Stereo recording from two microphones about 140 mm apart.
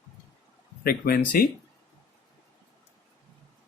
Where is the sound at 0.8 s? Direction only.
90° left.